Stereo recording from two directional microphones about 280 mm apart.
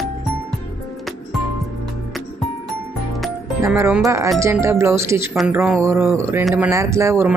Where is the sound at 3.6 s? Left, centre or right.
Centre.